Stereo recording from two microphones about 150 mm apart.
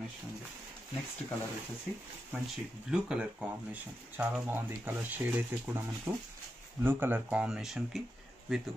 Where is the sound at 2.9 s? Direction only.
5° right (ahead or behind).